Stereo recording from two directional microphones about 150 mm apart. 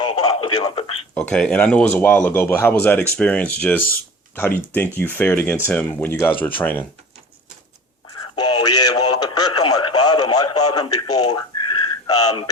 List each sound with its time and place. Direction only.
0.0 s radio: 30° left (ahead or behind)
1.1 s speech: 10° left (ahead or behind)
8.4 s speech: 30° left (ahead or behind)